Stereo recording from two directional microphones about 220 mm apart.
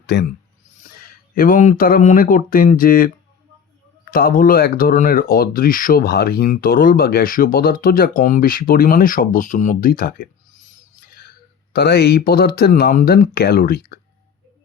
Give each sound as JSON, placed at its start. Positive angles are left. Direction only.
{"t": 0.0, "sound": "speech", "side_deg": 50}
{"t": 1.4, "sound": "speech", "side_deg": 35}
{"t": 4.1, "sound": "speech", "side_deg": 40}